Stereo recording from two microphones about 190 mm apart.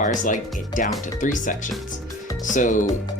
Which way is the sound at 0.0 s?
40° left (ahead or behind).